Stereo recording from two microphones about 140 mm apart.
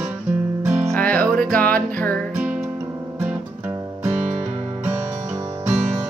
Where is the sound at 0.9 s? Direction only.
10° left (ahead or behind).